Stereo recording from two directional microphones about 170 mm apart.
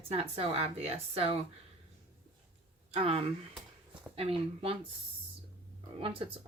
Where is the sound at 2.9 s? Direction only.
35° right (ahead or behind).